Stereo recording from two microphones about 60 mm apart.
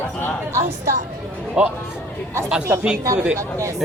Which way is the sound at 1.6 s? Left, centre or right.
Centre.